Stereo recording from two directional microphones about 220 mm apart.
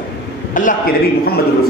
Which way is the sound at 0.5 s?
40° left (ahead or behind).